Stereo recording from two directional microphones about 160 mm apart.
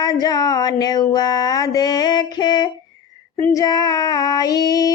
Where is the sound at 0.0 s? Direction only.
25° left (ahead or behind).